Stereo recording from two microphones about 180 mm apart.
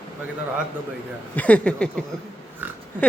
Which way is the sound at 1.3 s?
5° left (ahead or behind).